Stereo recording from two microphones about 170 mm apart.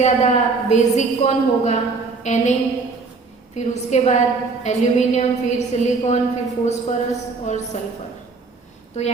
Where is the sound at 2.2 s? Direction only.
40° left (ahead or behind).